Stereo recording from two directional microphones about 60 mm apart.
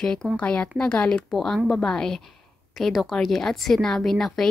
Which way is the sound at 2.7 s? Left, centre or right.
Centre.